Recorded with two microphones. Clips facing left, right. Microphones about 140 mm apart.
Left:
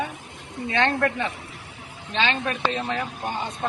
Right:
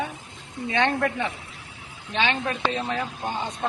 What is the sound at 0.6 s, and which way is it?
A man's voice, 10° right (ahead or behind).